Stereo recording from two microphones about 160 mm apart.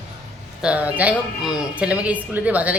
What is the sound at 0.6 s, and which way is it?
A woman's voice, 10° right (ahead or behind).